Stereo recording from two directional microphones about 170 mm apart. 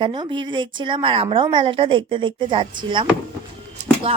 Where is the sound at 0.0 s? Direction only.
25° right (ahead or behind).